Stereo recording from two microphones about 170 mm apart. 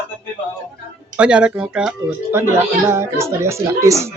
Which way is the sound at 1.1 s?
5° right (ahead or behind).